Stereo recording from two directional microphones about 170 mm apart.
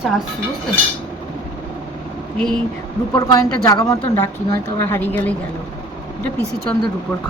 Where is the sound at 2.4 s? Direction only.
5° left (ahead or behind).